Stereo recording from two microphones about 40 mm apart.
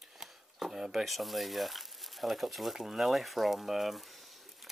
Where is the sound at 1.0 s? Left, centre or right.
Centre.